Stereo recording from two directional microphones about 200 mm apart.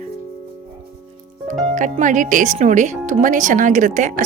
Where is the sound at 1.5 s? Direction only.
40° right (ahead or behind).